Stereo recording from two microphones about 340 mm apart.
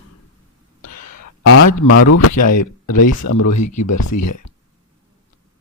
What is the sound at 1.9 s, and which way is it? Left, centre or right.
Speech, left.